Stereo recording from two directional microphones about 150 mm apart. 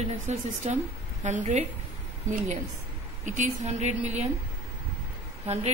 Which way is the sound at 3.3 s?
50° right (ahead or behind).